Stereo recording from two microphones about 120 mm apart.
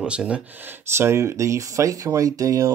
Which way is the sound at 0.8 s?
20° right (ahead or behind).